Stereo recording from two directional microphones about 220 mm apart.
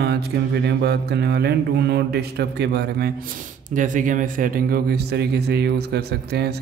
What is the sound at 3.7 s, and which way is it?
A man's voice, 35° right (ahead or behind).